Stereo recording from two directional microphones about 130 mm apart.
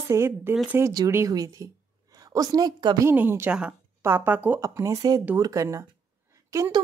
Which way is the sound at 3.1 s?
15° right (ahead or behind).